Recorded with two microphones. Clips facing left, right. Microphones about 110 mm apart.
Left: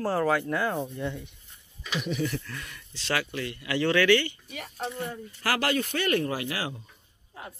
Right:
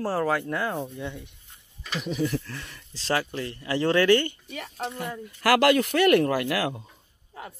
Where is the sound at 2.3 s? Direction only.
30° right (ahead or behind).